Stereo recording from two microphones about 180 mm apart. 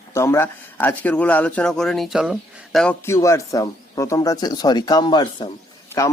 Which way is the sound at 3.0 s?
15° left (ahead or behind).